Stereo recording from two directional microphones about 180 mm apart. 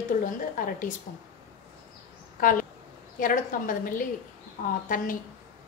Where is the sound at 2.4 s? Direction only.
50° left (ahead or behind).